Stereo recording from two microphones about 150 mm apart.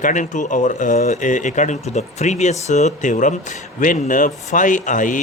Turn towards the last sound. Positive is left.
turn(degrees=60)  # may be behind; listen again after turning